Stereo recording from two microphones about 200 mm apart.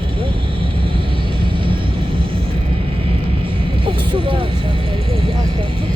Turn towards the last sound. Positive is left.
turn(degrees=-25)  # may be behind; listen again after turning